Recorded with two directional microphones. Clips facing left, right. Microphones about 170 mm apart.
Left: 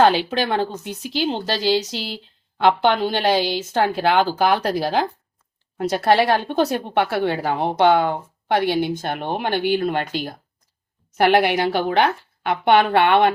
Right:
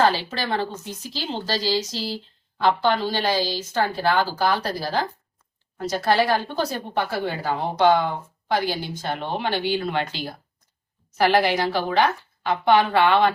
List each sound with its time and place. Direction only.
0.0 s speech: 65° left (ahead or behind); by 10.2 s 50° left (ahead or behind)
11.2 s speech: 60° left (ahead or behind)